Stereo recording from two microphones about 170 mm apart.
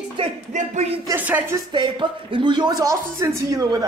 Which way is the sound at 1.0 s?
10° right (ahead or behind).